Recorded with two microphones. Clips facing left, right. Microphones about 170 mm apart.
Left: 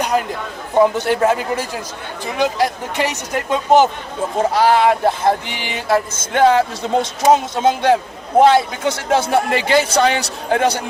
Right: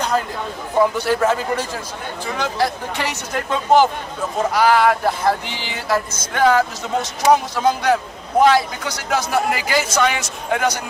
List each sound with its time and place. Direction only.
0.1 s speech: 15° left (ahead or behind); by 10.8 s 30° left (ahead or behind)